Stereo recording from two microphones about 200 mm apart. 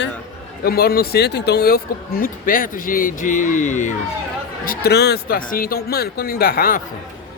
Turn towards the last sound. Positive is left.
turn(degrees=45)  # may be behind; listen again after turning